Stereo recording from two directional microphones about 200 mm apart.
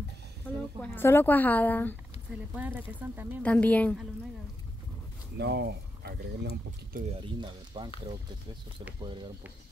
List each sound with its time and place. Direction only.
0.7 s a woman's voice: 10° left (ahead or behind)
2.5 s speech: 10° right (ahead or behind)
3.4 s a woman's voice: 5° left (ahead or behind)
5.4 s speech: 55° right (ahead or behind)
7.2 s speech: 25° right (ahead or behind)